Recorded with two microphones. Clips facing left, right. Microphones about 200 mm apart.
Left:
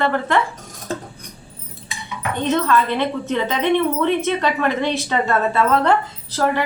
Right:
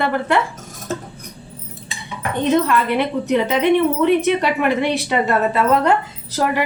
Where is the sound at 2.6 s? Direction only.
15° right (ahead or behind).